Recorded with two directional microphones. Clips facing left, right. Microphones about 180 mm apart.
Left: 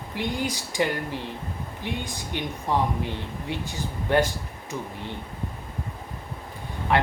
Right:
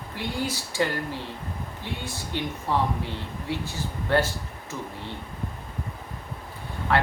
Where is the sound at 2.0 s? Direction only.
15° left (ahead or behind).